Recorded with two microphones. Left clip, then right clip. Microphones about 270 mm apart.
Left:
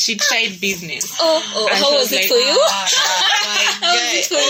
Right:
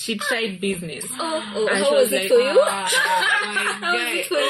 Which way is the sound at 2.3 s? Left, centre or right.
Left.